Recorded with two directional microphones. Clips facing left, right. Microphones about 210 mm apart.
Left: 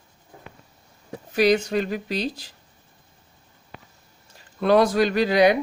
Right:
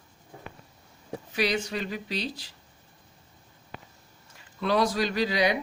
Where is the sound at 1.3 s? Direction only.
45° left (ahead or behind).